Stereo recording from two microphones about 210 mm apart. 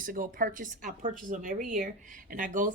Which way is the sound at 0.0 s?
40° right (ahead or behind).